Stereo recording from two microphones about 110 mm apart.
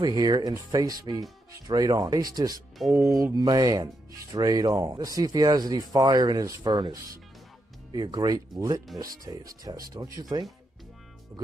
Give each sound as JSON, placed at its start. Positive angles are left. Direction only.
{"t": 0.0, "sound": "speech", "side_deg": -40}
{"t": 2.8, "sound": "speech", "side_deg": 0}
{"t": 3.3, "sound": "speech", "side_deg": -35}